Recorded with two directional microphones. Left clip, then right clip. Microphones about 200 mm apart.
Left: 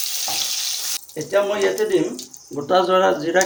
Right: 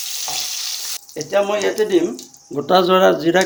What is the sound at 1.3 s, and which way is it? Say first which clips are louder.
Speech: right 1 dB; 55° right (ahead or behind).